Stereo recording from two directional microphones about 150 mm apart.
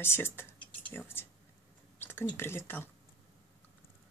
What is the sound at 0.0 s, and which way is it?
Speech, 15° left (ahead or behind).